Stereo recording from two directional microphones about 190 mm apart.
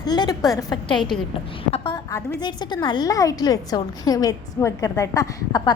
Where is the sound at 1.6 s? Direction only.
30° left (ahead or behind).